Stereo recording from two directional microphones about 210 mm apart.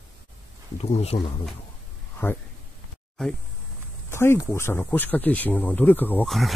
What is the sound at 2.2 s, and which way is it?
Speech, 10° left (ahead or behind).